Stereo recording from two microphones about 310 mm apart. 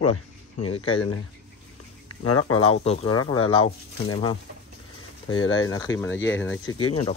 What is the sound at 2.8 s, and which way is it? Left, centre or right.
Speech, centre.